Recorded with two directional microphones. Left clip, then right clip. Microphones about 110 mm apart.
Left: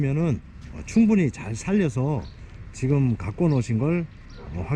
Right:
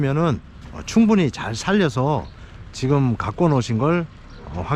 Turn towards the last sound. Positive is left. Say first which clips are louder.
# right 7 dB
turn(degrees=25)  # may be behind; listen again after turning